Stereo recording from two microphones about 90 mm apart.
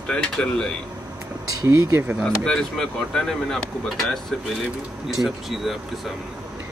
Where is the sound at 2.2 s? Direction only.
5° left (ahead or behind).